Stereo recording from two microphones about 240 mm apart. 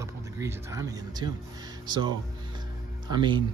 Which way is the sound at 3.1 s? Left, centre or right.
Centre.